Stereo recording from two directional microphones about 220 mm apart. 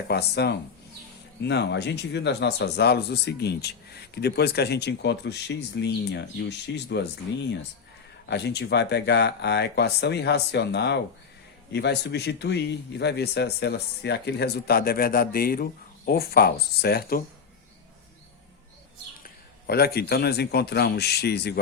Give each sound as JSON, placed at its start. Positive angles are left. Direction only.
{"t": 0.1, "sound": "speech", "side_deg": 50}
{"t": 8.3, "sound": "speech", "side_deg": 50}
{"t": 19.2, "sound": "a man's voice", "side_deg": 45}